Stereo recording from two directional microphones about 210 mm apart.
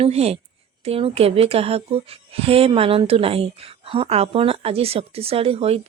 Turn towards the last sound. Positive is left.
turn(degrees=-30)  # may be behind; listen again after turning